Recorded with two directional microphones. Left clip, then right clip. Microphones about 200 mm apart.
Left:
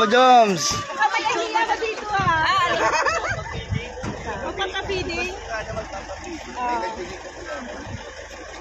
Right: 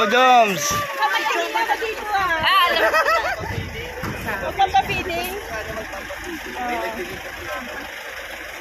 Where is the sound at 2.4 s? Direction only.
55° left (ahead or behind).